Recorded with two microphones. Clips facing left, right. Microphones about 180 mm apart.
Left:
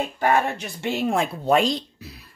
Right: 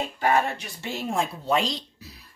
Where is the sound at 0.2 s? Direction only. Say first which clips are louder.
Left 2 dB; 60° left (ahead or behind).